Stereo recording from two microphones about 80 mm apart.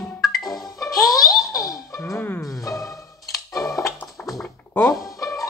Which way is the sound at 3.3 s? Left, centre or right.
Left.